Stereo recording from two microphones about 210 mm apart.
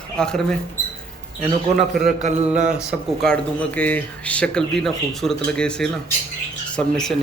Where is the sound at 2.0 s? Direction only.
35° right (ahead or behind).